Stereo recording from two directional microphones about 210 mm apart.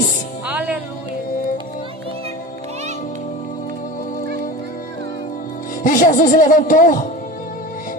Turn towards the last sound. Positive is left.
turn(degrees=40)  # may be behind; listen again after turning